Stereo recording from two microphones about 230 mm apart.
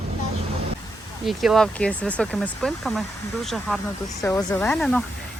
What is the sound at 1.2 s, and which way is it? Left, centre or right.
Speech, centre.